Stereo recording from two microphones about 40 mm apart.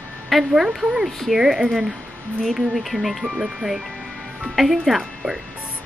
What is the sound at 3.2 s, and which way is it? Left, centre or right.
Speech, centre.